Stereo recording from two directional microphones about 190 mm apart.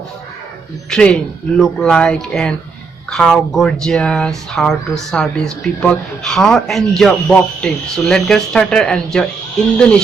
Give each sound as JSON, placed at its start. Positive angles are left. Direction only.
{"t": 0.9, "sound": "speech", "side_deg": 5}